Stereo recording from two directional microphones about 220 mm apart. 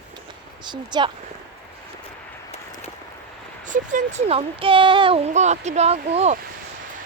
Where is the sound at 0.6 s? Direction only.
20° right (ahead or behind).